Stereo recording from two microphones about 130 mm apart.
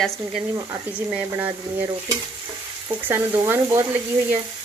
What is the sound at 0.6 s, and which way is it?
Speech, 30° right (ahead or behind).